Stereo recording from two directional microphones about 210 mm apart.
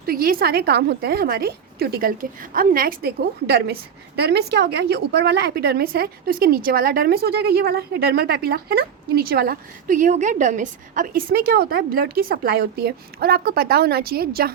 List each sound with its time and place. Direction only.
0.0 s a woman's voice: 45° right (ahead or behind)